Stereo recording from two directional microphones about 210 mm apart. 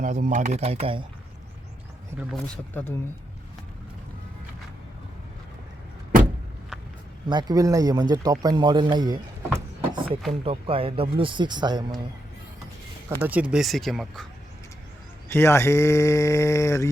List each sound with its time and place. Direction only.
0.0 s speech: 35° right (ahead or behind)
2.8 s speech: 10° left (ahead or behind)
7.3 s speech: 20° right (ahead or behind)
13.1 s speech: 10° right (ahead or behind)
15.3 s speech: 10° left (ahead or behind)